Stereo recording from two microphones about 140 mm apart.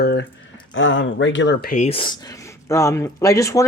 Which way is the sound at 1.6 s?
65° left (ahead or behind).